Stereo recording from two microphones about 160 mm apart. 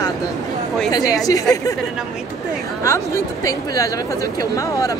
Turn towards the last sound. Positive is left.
turn(degrees=20)  # may be behind; listen again after turning